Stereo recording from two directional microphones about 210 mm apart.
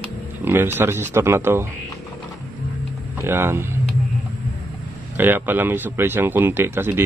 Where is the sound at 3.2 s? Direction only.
10° right (ahead or behind).